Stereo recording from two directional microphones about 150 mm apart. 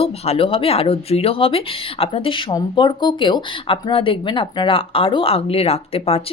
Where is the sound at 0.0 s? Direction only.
40° left (ahead or behind).